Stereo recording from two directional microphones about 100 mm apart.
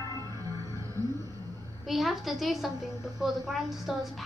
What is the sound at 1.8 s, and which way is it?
A woman's voice, centre (ahead or behind).